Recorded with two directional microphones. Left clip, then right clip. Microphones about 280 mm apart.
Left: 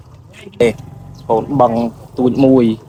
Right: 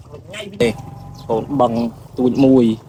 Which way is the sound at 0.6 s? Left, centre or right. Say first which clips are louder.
Left 4 dB; centre.